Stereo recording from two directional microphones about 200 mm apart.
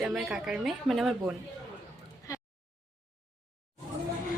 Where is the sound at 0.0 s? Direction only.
Centre (ahead or behind).